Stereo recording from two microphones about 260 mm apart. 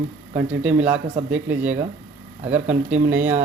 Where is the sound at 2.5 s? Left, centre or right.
Right.